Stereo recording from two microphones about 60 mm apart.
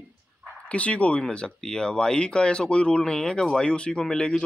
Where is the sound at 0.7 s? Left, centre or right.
Left.